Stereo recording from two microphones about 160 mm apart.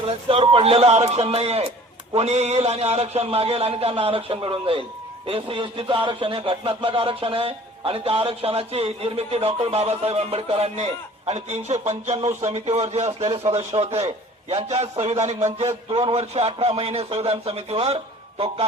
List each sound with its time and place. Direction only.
0.3 s speech: 35° right (ahead or behind)